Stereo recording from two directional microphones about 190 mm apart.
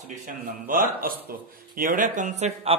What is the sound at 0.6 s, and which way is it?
Speech, 50° right (ahead or behind).